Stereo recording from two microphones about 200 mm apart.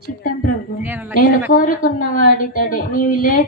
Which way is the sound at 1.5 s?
45° left (ahead or behind).